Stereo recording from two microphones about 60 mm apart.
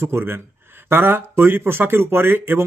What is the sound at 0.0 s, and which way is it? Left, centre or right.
Speech, right.